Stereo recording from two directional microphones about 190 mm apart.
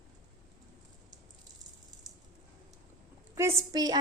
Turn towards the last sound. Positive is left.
turn(degrees=-20)  # may be behind; listen again after turning